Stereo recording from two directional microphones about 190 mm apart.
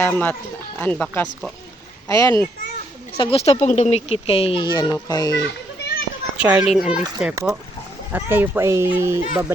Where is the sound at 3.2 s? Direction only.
30° left (ahead or behind).